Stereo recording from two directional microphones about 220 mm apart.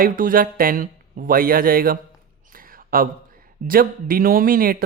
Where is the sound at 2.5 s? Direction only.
40° right (ahead or behind).